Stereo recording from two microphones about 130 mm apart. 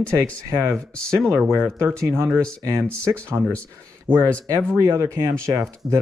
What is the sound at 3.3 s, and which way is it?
Speech, 20° right (ahead or behind).